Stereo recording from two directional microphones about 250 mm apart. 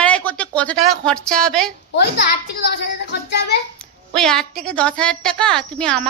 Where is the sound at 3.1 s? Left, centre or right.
Left.